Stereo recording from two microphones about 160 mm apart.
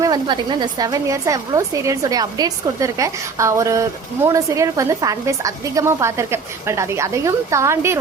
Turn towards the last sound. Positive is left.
turn(degrees=-15)  # may be behind; listen again after turning